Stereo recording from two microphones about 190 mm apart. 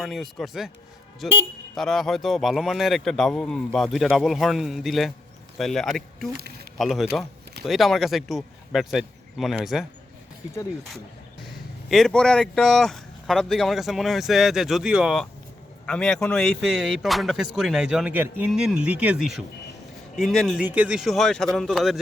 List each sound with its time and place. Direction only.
0.0 s speech: centre (ahead or behind)
6.3 s a sound: 55° right (ahead or behind)
6.7 s speech: centre (ahead or behind)
11.9 s speech: centre (ahead or behind)